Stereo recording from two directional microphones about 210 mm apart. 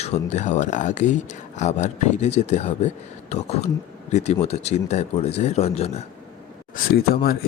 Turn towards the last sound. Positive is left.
turn(degrees=45)  # may be behind; listen again after turning